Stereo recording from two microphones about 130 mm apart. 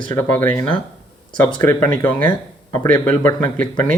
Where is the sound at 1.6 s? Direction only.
15° left (ahead or behind).